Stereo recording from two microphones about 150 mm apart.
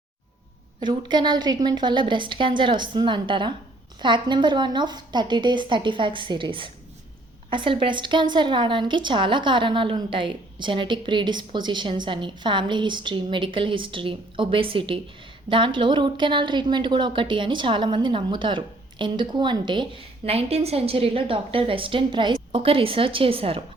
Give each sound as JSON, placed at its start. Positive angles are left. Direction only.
{"t": 0.8, "sound": "a woman's voice", "side_deg": -30}